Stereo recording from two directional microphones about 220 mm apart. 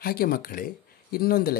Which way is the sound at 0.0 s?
45° left (ahead or behind).